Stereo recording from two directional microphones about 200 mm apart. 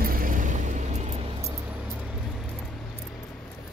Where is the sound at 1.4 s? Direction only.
15° right (ahead or behind).